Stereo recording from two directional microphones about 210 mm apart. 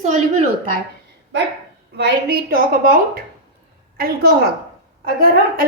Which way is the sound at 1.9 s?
50° right (ahead or behind).